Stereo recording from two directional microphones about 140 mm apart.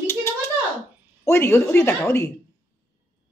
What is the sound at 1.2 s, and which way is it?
Speech, 15° left (ahead or behind).